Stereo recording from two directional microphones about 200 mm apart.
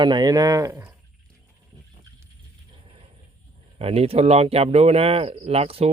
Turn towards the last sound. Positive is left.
turn(degrees=-30)  # may be behind; listen again after turning